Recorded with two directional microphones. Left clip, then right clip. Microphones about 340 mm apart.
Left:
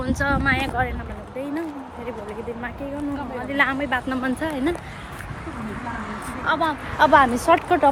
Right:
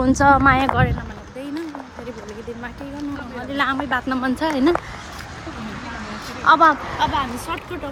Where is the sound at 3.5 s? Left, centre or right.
Centre.